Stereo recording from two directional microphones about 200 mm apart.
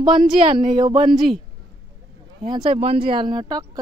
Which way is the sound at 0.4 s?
30° right (ahead or behind).